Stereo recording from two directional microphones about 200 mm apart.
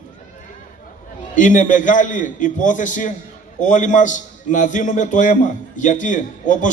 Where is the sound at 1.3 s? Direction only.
40° left (ahead or behind).